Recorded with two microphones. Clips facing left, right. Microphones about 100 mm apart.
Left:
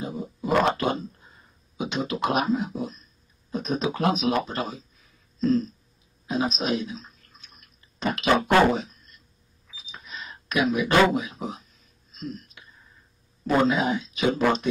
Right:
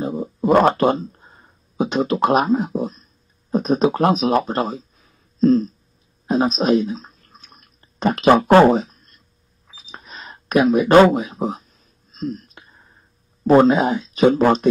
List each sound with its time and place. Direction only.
0.0 s a sound: 40° right (ahead or behind)
1.1 s speech: 55° right (ahead or behind); by 4.8 s 40° right (ahead or behind)
5.4 s throat clearing: 40° right (ahead or behind)
6.2 s drip: 40° right (ahead or behind)
9.7 s a sound: 40° right (ahead or behind)
12.1 s whispering: 40° right (ahead or behind)
13.5 s speech: 40° right (ahead or behind)